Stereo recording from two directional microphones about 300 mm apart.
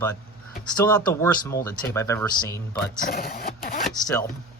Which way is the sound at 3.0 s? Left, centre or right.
Left.